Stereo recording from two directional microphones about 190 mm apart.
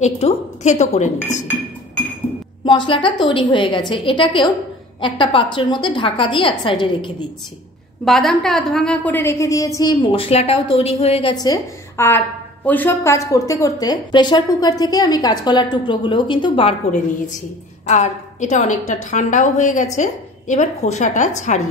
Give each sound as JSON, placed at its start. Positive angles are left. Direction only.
{"t": 0.0, "sound": "a woman's voice", "side_deg": 35}
{"t": 2.6, "sound": "speech", "side_deg": 25}
{"t": 8.0, "sound": "a woman's voice", "side_deg": 0}
{"t": 11.3, "sound": "a woman's voice", "side_deg": 20}
{"t": 17.8, "sound": "a woman's voice", "side_deg": 40}